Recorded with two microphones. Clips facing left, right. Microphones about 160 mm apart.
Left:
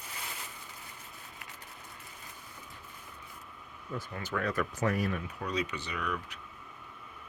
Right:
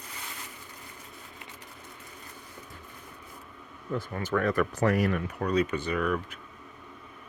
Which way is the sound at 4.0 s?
50° right (ahead or behind).